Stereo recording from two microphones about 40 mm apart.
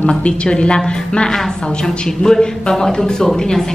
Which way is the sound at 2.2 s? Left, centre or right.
Centre.